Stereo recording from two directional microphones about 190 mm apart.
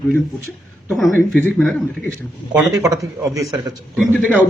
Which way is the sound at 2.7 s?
15° right (ahead or behind).